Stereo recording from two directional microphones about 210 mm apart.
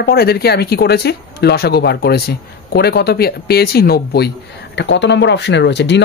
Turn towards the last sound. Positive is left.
turn(degrees=55)  # may be behind; listen again after turning